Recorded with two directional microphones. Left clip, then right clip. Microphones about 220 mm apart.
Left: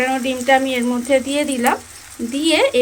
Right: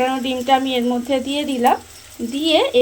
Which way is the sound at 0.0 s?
Centre (ahead or behind).